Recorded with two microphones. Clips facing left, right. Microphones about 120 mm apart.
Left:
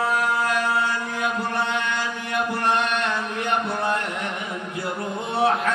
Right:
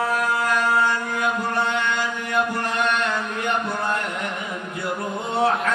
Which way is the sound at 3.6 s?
30° left (ahead or behind).